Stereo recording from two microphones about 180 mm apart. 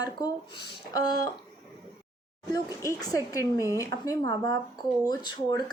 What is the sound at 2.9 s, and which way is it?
A woman's voice, 20° left (ahead or behind).